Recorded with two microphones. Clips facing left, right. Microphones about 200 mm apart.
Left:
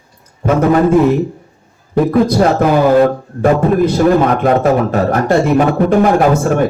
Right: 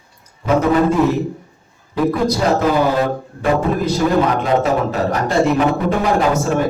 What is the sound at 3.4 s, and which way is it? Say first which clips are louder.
A man's voice: left 6 dB; 55° left (ahead or behind).